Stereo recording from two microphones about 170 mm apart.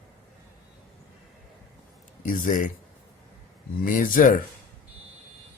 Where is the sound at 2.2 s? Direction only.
50° left (ahead or behind).